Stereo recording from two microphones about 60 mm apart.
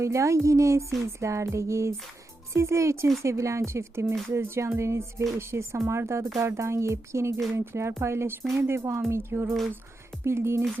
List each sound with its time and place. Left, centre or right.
0.0 s music: right
3.2 s a woman's voice: right